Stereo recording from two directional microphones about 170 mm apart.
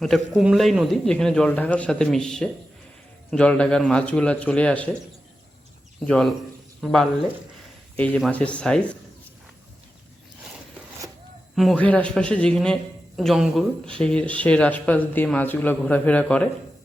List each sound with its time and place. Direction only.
0.0 s a man's voice: centre (ahead or behind)
6.1 s a man's voice: 5° left (ahead or behind)
11.5 s a man's voice: 5° left (ahead or behind)